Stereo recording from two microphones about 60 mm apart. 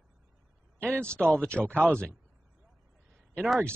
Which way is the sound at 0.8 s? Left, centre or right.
Centre.